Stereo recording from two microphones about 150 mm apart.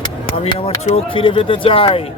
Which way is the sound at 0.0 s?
35° left (ahead or behind).